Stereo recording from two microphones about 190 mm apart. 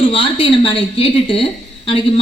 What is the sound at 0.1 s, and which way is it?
A woman's voice, 25° left (ahead or behind).